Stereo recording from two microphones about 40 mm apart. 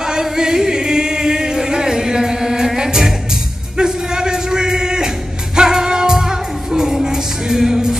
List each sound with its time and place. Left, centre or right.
0.1 s choir: centre
3.7 s music: centre